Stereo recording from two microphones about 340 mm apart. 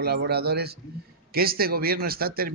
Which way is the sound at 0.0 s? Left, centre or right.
Right.